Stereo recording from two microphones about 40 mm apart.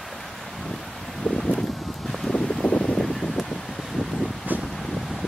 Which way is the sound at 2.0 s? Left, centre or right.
Centre.